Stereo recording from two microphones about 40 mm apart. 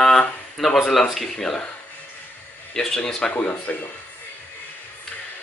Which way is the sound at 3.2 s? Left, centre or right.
Left.